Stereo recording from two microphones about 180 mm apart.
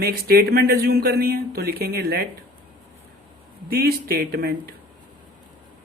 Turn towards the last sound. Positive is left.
turn(degrees=-60)  # may be behind; listen again after turning